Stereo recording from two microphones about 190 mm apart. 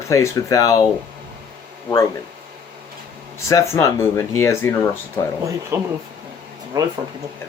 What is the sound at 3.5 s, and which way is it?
Speech, 15° left (ahead or behind).